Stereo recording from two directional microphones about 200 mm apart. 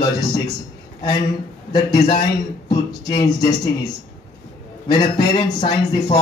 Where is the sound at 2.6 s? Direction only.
20° left (ahead or behind).